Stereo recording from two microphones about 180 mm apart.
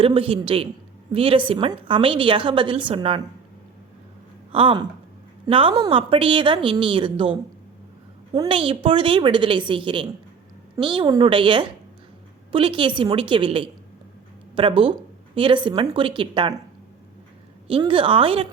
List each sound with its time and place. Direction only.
0.0 s a man's voice: 30° right (ahead or behind)
4.5 s a woman's voice: 30° right (ahead or behind)
17.7 s a woman's voice: 30° right (ahead or behind)